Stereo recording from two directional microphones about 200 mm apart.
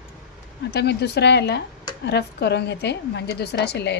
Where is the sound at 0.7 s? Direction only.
55° left (ahead or behind).